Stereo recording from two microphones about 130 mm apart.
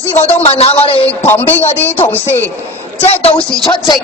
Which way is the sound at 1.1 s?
15° left (ahead or behind).